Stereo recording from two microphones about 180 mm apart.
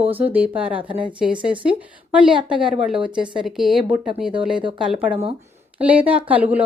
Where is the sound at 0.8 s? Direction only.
30° right (ahead or behind).